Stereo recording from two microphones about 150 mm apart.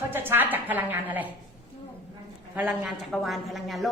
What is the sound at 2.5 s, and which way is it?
A woman's voice, 5° right (ahead or behind).